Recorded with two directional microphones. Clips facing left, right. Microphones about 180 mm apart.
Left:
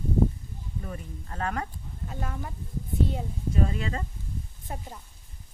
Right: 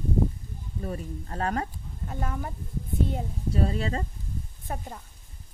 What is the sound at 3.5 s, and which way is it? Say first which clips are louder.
Speech: right 1 dB; 35° right (ahead or behind).